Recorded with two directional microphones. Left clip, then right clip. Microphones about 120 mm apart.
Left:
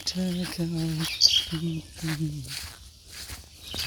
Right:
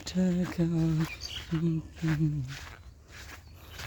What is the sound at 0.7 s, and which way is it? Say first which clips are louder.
Speech: left 4 dB; 20° left (ahead or behind).